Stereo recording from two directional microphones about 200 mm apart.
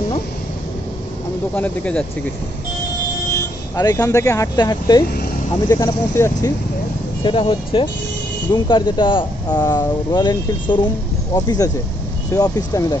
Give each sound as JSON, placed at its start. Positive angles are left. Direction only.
{"t": 1.5, "sound": "speech", "side_deg": 5}
{"t": 3.7, "sound": "speech", "side_deg": 20}
{"t": 7.2, "sound": "speech", "side_deg": 25}